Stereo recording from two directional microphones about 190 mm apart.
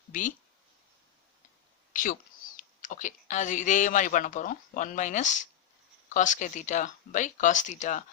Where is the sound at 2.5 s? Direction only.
45° left (ahead or behind).